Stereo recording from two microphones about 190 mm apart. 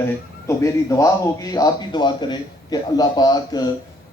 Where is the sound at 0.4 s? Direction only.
15° left (ahead or behind).